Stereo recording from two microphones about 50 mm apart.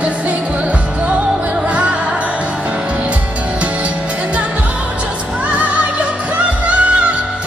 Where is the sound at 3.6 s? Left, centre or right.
Right.